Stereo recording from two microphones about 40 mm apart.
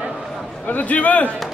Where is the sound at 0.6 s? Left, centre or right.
Left.